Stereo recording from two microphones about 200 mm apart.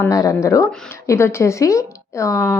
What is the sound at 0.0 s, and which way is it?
Speech, 15° left (ahead or behind).